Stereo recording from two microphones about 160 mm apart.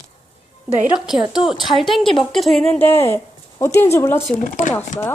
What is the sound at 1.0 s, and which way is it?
A woman's voice, 5° right (ahead or behind).